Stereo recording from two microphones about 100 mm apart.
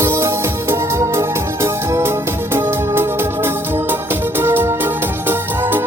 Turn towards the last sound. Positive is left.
turn(degrees=-20)  # may be behind; listen again after turning